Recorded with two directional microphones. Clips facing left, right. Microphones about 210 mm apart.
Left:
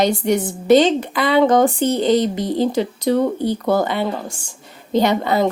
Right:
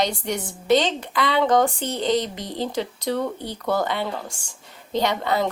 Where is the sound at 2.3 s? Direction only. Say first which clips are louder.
Left 11 dB; 50° left (ahead or behind).